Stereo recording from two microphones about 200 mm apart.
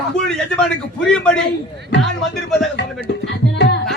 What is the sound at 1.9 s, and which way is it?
Speech, 60° left (ahead or behind).